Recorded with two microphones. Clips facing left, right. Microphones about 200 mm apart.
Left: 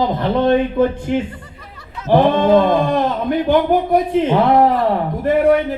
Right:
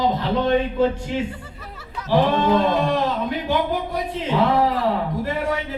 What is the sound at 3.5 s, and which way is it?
A man's voice, 50° left (ahead or behind).